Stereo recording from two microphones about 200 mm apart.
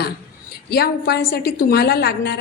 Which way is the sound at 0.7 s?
50° left (ahead or behind).